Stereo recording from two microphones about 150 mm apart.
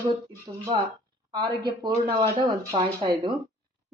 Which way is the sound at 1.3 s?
30° right (ahead or behind).